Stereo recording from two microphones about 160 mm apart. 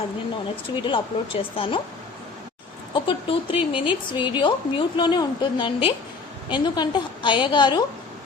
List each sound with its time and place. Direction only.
0.8 s a woman's voice: 30° left (ahead or behind)
2.9 s a woman's voice: 30° left (ahead or behind)